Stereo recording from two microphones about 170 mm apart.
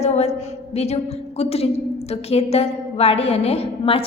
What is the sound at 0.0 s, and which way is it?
A woman's voice, 40° left (ahead or behind).